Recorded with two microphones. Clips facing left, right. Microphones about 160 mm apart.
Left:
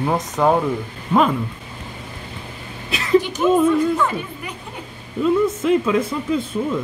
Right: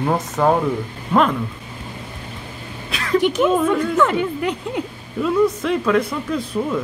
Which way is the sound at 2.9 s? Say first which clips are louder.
Left 2 dB; centre (ahead or behind).